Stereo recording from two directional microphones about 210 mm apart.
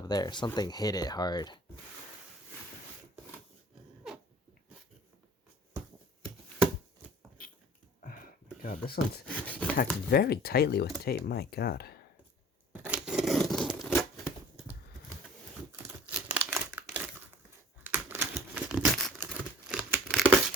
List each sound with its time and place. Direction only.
0.0 s speech: 20° left (ahead or behind)
8.0 s a sound: 40° left (ahead or behind)
9.2 s speech: 5° left (ahead or behind)
10.1 s speech: 45° left (ahead or behind)
12.7 s tearing: 10° right (ahead or behind)
15.7 s crumpling: 10° right (ahead or behind)